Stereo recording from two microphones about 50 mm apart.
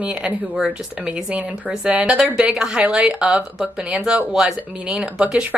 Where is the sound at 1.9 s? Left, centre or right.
Right.